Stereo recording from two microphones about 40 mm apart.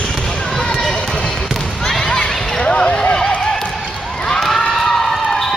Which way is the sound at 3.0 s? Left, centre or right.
Left.